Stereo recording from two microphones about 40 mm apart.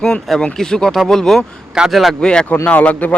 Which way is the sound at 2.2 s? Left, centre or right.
Left.